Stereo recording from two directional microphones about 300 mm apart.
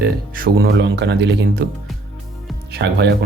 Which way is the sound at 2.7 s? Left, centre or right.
Right.